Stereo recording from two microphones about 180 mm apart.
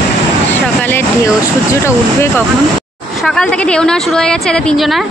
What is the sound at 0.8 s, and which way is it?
Speech, 15° left (ahead or behind).